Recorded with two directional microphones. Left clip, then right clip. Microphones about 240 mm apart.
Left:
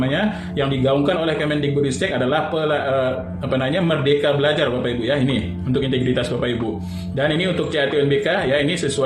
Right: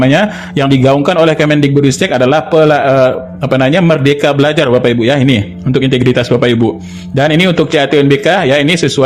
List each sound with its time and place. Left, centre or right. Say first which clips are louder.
0.0 s a man's voice: right 11 dB; right